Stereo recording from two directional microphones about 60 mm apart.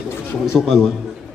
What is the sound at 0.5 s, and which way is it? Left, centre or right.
Speech, centre.